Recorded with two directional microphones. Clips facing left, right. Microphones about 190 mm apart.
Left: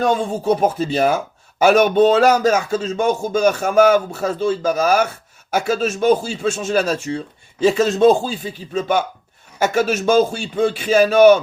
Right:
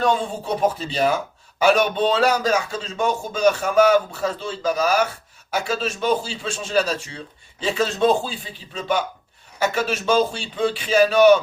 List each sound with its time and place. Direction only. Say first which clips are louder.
0.0 s speech: left 3 dB; 45° left (ahead or behind)